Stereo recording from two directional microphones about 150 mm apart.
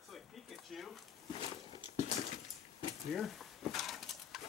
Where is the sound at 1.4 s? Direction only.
35° right (ahead or behind).